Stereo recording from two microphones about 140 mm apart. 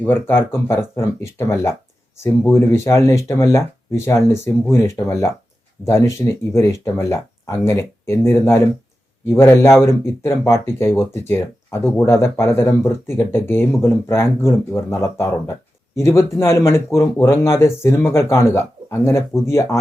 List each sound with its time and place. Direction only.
0.0 s speech: 15° left (ahead or behind)